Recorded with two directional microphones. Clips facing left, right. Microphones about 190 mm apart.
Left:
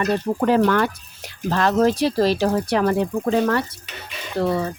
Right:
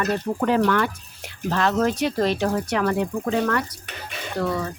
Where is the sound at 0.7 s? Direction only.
40° left (ahead or behind).